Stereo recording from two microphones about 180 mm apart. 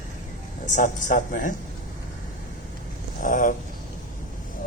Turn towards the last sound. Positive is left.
turn(degrees=45)  # may be behind; listen again after turning